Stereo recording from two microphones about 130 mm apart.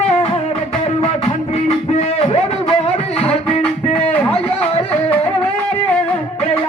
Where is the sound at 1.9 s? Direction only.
50° left (ahead or behind).